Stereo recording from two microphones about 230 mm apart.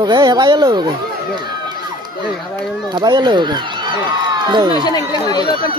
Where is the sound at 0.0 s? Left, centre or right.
Centre.